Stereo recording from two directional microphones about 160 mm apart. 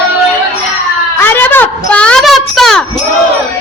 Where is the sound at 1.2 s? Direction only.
15° left (ahead or behind).